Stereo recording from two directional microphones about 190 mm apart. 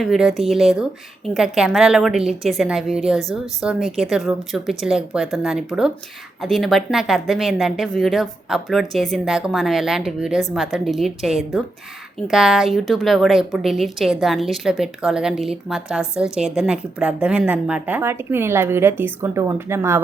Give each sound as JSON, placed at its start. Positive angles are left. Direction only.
{"t": 0.0, "sound": "a woman's voice", "side_deg": 0}